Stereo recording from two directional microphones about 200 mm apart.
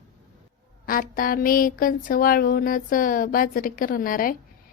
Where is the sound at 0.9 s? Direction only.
45° left (ahead or behind).